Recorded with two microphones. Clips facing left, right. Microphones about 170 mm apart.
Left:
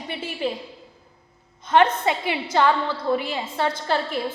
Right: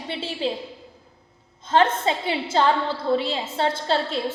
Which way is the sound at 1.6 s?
25° right (ahead or behind).